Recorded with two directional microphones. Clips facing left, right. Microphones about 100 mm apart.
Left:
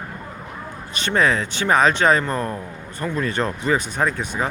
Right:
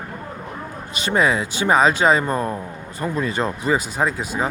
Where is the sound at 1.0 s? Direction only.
10° right (ahead or behind).